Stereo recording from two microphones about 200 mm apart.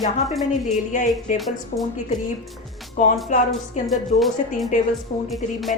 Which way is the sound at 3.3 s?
35° left (ahead or behind).